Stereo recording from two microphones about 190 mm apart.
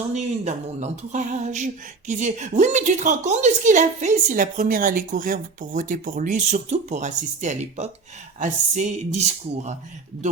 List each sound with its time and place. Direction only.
0.1 s speech: 35° right (ahead or behind)